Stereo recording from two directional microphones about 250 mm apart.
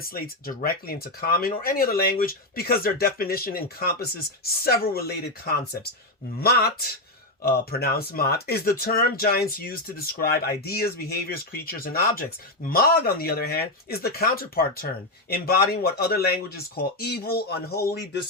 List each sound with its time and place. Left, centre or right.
0.0 s speech: left
6.4 s speech: left